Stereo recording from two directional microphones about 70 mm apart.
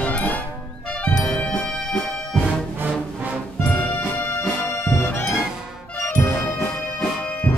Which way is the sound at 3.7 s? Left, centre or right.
Left.